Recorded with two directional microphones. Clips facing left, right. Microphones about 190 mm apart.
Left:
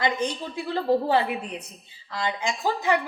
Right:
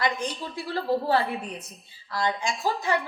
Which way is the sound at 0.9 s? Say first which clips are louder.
Left 4 dB; 15° left (ahead or behind).